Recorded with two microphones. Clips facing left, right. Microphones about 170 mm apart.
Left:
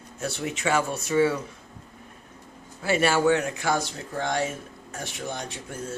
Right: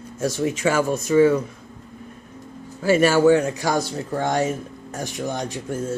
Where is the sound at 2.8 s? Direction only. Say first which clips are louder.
Right 6 dB; 40° right (ahead or behind).